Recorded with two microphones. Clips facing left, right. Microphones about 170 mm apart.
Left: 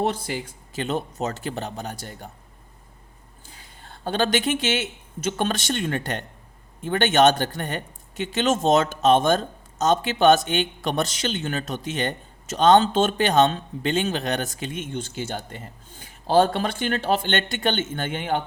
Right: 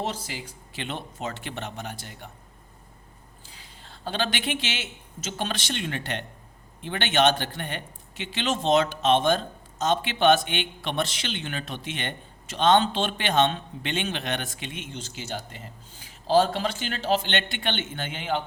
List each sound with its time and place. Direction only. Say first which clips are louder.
0.0 s speech: left 7 dB; 55° left (ahead or behind)
3.4 s speech: left 3 dB; 50° left (ahead or behind)